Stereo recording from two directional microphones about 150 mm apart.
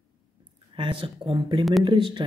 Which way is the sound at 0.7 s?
35° right (ahead or behind).